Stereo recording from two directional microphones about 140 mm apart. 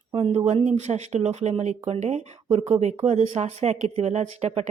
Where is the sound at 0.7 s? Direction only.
50° right (ahead or behind).